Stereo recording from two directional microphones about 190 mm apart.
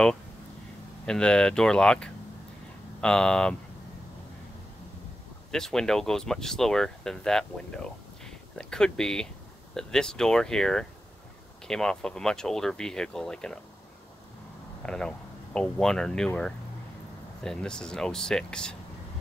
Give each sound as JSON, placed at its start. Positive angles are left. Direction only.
{"t": 1.0, "sound": "speech", "side_deg": 5}
{"t": 5.5, "sound": "speech", "side_deg": 5}
{"t": 14.9, "sound": "speech", "side_deg": 5}